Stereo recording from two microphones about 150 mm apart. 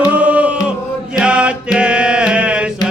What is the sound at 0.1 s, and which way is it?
Music, 10° right (ahead or behind).